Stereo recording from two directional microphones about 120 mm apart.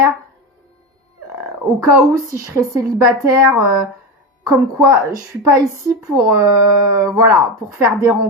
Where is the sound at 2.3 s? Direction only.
25° right (ahead or behind).